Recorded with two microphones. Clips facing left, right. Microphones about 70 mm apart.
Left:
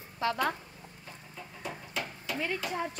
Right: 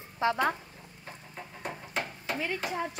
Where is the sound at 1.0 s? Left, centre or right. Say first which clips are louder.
Right 4 dB; right.